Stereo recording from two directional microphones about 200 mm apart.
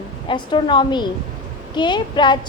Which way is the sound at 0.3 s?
25° left (ahead or behind).